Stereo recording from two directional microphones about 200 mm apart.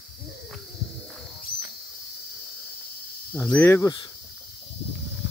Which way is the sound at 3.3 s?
10° left (ahead or behind).